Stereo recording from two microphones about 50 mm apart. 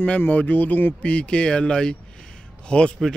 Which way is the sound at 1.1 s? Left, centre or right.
Left.